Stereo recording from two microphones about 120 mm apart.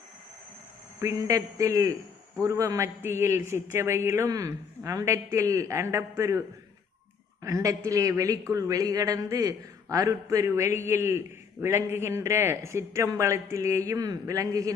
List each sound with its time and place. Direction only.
1.0 s a man's voice: 30° right (ahead or behind)
7.4 s a man's voice: 25° right (ahead or behind)